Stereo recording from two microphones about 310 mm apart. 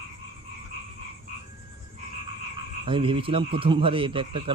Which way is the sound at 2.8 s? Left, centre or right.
Centre.